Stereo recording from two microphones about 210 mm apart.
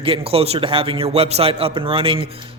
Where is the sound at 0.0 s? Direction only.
25° right (ahead or behind).